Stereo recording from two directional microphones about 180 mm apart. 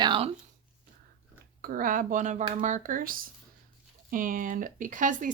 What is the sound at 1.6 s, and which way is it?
Speech, 50° right (ahead or behind).